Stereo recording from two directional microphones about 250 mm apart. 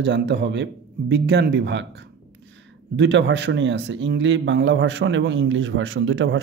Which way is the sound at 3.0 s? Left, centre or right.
Right.